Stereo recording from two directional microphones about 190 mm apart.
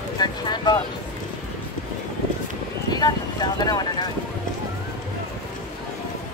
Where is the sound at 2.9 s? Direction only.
20° left (ahead or behind).